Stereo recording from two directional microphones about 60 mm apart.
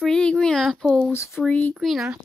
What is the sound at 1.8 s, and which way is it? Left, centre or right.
Speech, centre.